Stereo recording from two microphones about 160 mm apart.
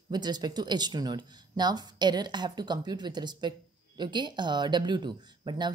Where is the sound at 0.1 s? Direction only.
25° right (ahead or behind).